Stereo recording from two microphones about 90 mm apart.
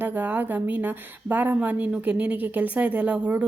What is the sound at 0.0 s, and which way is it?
A woman's voice, 20° right (ahead or behind).